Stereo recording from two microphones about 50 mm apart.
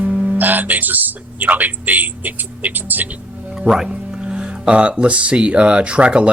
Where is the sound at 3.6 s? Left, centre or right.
Centre.